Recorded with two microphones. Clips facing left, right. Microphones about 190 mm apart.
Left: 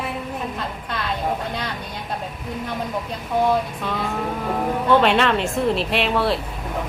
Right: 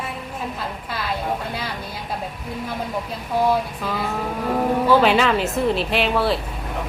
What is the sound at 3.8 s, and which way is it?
Speech, 5° right (ahead or behind).